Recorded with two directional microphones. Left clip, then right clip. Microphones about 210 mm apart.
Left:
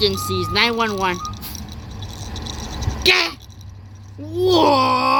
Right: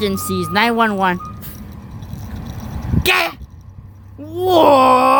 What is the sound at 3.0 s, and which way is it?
Speech, 35° right (ahead or behind).